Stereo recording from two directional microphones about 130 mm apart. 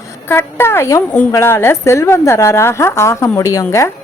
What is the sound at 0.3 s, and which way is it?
A woman's voice, 20° left (ahead or behind).